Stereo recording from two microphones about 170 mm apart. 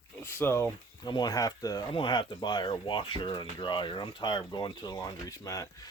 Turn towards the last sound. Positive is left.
turn(degrees=20)  # may be behind; listen again after turning